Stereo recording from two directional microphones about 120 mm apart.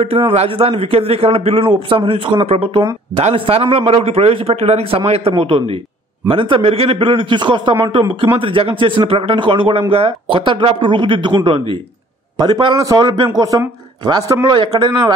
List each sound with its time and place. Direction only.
0.3 s a man's voice: 55° right (ahead or behind); by 14.9 s 35° right (ahead or behind)